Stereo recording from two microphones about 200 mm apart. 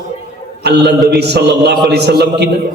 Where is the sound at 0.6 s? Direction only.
55° right (ahead or behind).